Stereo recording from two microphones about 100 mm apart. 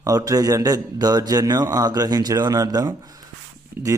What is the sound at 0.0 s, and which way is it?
Speech, 35° right (ahead or behind).